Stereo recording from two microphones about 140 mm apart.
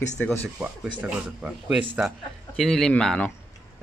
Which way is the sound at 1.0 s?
10° right (ahead or behind).